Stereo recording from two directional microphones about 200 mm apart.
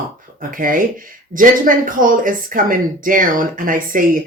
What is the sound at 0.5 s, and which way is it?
Speech, 45° right (ahead or behind).